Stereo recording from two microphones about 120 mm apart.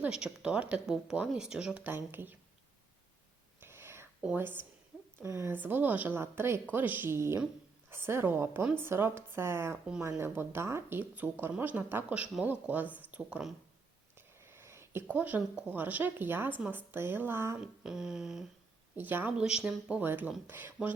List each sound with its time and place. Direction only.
0.0 s speech: 10° right (ahead or behind)
3.6 s whispering: 20° right (ahead or behind)
5.2 s speech: 25° right (ahead or behind)
14.2 s a sound: 20° right (ahead or behind)
15.1 s speech: 15° right (ahead or behind)
17.6 s speech: 5° right (ahead or behind)
18.9 s speech: 15° right (ahead or behind)